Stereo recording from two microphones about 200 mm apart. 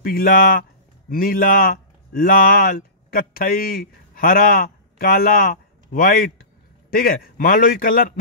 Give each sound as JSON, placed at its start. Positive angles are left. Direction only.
{"t": 0.0, "sound": "a man's voice", "side_deg": 45}